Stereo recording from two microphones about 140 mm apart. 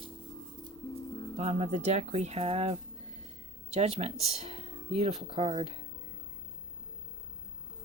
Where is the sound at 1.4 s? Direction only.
55° right (ahead or behind).